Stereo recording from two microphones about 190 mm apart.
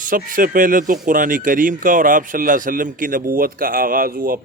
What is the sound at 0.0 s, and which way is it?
Speech, 45° right (ahead or behind).